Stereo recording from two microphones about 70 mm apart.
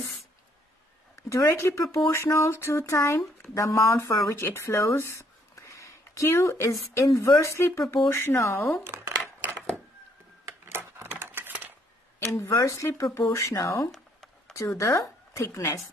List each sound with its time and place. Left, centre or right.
1.1 s speech: left
8.8 s a sound: right
10.7 s typewriter: right
12.2 s speech: left
12.6 s speech: left